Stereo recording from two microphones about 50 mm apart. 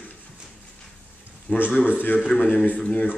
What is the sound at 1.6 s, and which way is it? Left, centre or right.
Speech, left.